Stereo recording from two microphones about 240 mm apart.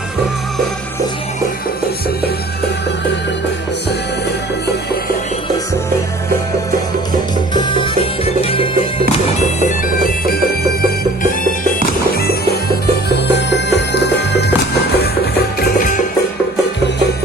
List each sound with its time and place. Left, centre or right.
7.5 s music: centre
9.6 s bagpipes: left
12.1 s music: left